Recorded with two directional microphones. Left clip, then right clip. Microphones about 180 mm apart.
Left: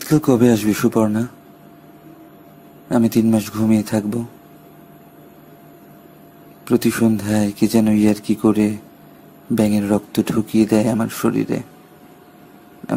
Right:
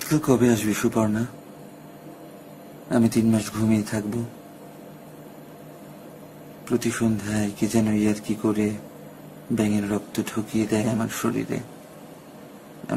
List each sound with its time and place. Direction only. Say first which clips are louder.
0.1 s speech: left 6 dB; 20° left (ahead or behind)
2.9 s speech: left 5 dB; 20° left (ahead or behind)
6.6 s speech: left 7 dB; 25° left (ahead or behind)
9.8 s speech: left 8 dB; 25° left (ahead or behind)